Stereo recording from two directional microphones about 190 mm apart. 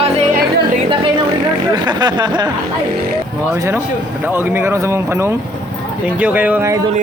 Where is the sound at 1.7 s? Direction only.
20° right (ahead or behind).